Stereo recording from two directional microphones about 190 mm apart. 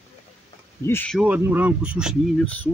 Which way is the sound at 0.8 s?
10° left (ahead or behind).